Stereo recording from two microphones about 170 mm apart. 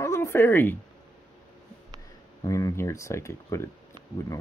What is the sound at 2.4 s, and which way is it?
Speech, 20° left (ahead or behind).